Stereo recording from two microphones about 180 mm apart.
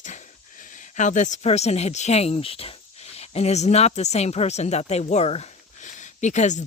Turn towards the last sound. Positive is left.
turn(degrees=40)  # may be behind; listen again after turning